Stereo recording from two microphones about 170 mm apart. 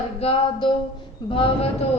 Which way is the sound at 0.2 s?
35° left (ahead or behind).